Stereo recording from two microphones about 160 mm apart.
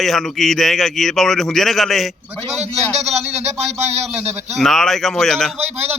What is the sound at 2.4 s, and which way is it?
A man's voice, 40° right (ahead or behind).